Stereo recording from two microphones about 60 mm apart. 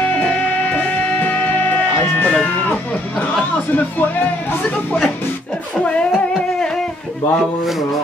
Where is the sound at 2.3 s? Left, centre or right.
Left.